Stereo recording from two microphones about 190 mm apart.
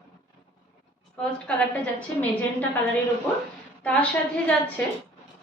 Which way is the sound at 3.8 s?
5° left (ahead or behind).